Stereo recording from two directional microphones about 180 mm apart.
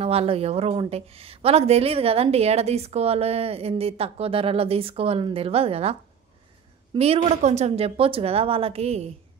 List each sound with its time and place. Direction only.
0.0 s speech: 35° right (ahead or behind)